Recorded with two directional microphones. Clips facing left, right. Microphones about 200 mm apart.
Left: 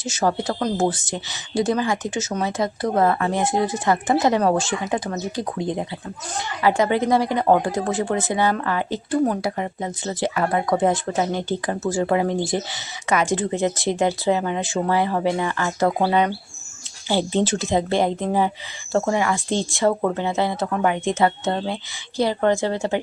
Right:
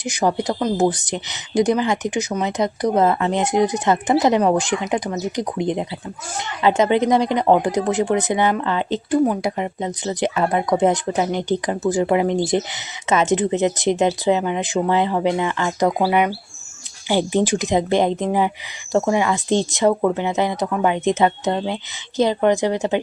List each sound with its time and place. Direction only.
0.0 s a woman's voice: 15° right (ahead or behind)
9.2 s a woman's voice: 10° right (ahead or behind)